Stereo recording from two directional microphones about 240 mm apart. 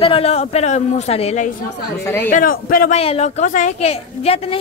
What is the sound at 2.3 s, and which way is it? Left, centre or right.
Speech, left.